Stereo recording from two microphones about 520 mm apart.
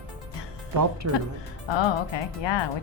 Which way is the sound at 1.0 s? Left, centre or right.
Right.